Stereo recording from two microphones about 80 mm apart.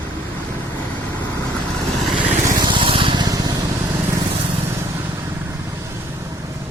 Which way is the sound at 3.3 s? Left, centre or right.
Right.